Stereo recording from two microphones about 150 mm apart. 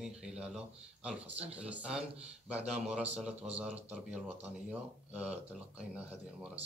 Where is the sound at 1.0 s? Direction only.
5° right (ahead or behind).